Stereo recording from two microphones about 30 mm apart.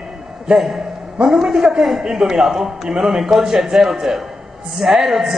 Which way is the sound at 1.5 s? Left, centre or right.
Centre.